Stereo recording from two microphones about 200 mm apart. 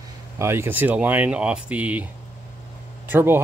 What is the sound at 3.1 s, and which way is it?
Speech, 10° right (ahead or behind).